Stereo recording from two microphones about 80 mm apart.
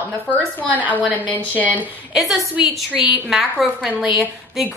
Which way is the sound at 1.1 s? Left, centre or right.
Left.